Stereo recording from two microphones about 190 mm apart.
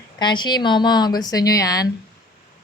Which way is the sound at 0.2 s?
25° left (ahead or behind).